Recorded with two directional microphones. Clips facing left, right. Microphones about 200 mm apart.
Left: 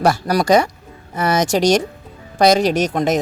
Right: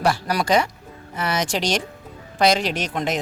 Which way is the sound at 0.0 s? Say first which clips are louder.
Left 5 dB; 40° left (ahead or behind).